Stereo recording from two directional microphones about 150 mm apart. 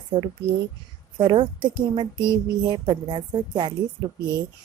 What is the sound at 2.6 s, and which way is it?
A woman's voice, 30° right (ahead or behind).